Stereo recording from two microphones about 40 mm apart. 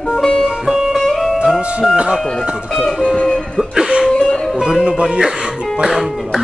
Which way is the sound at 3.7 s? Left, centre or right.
Centre.